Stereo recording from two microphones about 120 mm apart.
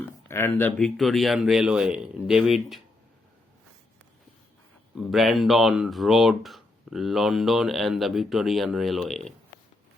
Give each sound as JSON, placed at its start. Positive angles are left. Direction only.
{"t": 0.0, "sound": "speech", "side_deg": 20}
{"t": 5.1, "sound": "speech", "side_deg": 0}